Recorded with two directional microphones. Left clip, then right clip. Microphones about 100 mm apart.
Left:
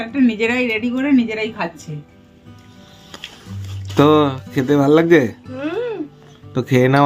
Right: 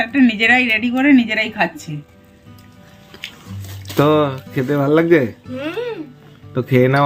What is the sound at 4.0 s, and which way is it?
Speech, 45° left (ahead or behind).